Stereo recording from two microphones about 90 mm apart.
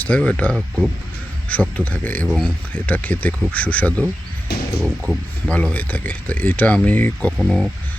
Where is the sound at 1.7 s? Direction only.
20° left (ahead or behind).